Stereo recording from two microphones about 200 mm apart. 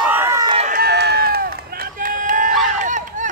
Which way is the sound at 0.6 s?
40° right (ahead or behind).